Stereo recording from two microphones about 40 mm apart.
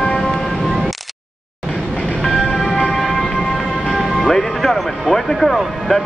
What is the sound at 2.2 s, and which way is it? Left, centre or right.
Vehicle, centre.